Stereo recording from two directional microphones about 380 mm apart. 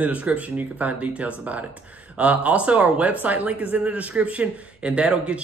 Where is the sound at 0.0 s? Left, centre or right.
Centre.